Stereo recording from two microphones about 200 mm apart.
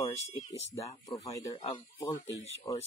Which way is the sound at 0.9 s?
20° left (ahead or behind).